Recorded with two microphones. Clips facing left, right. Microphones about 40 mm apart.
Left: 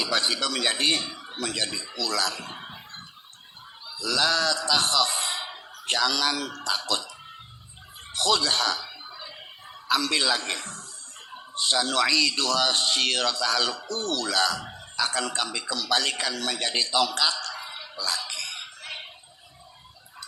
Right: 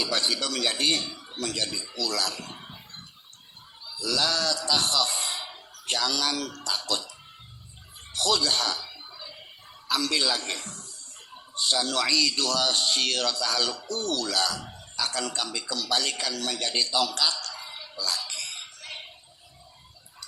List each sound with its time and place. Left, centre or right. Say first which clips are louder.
0.0 s a man's voice: left 2 dB; left
3.8 s a man's voice: left 2 dB; left
8.1 s a man's voice: left 1 dB; left
8.9 s a sound: left 3 dB; left
9.9 s a man's voice: left 2 dB; left